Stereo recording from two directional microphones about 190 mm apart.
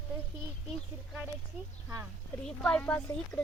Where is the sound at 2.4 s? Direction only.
5° left (ahead or behind).